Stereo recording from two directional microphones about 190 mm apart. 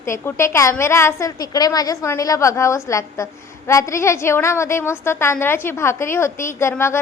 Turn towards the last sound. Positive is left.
turn(degrees=15)  # may be behind; listen again after turning